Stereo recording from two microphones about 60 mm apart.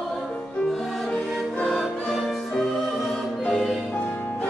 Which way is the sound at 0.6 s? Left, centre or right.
Centre.